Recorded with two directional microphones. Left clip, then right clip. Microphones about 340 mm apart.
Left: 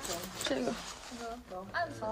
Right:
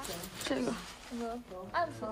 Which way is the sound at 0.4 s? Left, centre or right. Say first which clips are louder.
Even; centre.